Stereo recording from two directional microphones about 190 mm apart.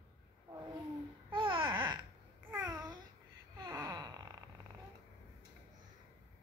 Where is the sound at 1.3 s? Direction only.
25° right (ahead or behind).